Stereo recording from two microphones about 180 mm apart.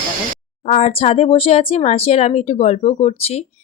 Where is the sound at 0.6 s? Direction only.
40° left (ahead or behind).